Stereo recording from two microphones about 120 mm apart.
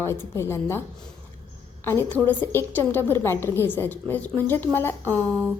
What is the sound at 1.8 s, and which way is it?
A woman's voice, 20° left (ahead or behind).